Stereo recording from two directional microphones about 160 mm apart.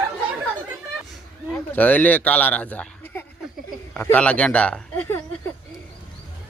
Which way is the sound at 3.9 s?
10° left (ahead or behind).